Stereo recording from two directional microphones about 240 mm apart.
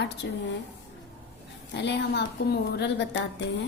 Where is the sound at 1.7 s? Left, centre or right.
Left.